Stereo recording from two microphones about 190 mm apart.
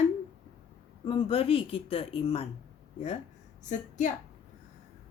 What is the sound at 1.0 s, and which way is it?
Speech, 30° left (ahead or behind).